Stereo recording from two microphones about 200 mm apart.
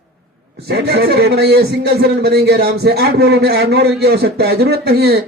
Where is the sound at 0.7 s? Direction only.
55° right (ahead or behind).